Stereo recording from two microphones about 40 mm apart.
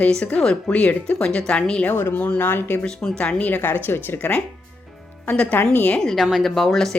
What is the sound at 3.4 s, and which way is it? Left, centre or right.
Speech, left.